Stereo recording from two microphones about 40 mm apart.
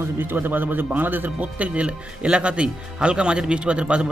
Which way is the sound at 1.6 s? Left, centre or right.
Right.